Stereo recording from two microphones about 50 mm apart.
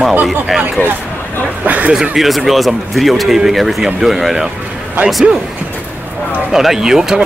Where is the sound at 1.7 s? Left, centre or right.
Right.